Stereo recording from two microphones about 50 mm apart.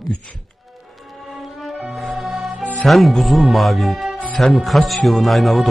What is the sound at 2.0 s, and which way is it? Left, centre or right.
Music, centre.